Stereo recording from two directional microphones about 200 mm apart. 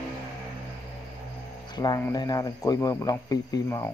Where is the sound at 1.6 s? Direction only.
20° left (ahead or behind).